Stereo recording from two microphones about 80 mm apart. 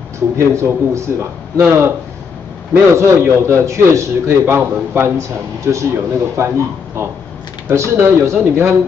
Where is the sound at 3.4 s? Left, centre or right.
Right.